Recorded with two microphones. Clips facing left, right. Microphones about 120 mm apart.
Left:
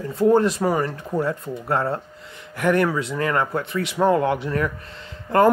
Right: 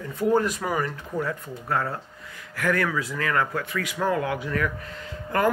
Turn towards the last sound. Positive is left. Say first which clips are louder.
# left 6 dB
turn(degrees=30)  # may be behind; listen again after turning